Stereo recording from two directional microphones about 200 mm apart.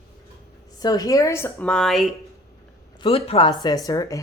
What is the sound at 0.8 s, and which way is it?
Speech, 20° left (ahead or behind).